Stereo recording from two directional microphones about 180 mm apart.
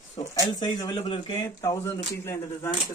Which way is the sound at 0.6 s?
25° left (ahead or behind).